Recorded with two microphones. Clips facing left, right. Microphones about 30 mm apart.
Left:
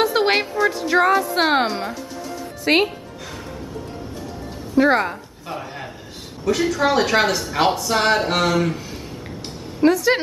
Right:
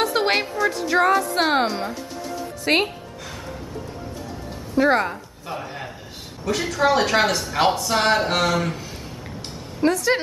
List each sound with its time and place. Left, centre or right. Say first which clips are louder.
0.0 s a woman's voice: left 3 dB; centre
2.6 s a woman's voice: left 3 dB; centre
4.7 s a woman's voice: left 2 dB; centre